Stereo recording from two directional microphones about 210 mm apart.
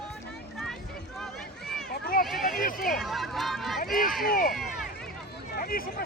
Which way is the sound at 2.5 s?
40° left (ahead or behind).